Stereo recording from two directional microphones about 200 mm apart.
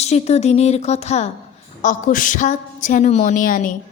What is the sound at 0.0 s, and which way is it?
A woman's voice, 35° left (ahead or behind).